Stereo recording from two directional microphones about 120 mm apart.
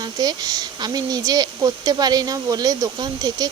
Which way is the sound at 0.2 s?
35° right (ahead or behind).